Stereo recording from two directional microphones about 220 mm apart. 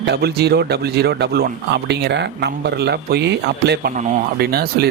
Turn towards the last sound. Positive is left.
turn(degrees=-45)  # may be behind; listen again after turning